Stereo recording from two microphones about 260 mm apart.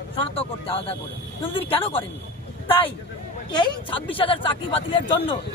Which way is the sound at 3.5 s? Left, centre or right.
Centre.